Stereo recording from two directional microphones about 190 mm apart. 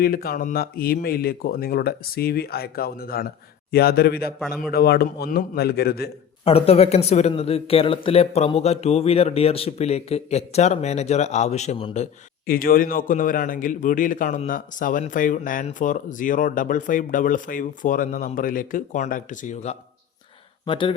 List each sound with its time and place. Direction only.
0.0 s a man's voice: 50° left (ahead or behind)
6.4 s speech: 30° left (ahead or behind)
12.5 s a man's voice: 50° left (ahead or behind)
20.7 s speech: 25° left (ahead or behind)